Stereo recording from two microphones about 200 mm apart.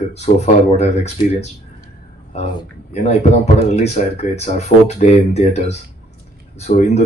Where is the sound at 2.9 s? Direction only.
35° left (ahead or behind).